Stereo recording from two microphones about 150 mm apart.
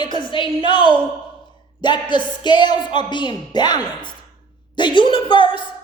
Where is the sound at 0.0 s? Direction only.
35° left (ahead or behind).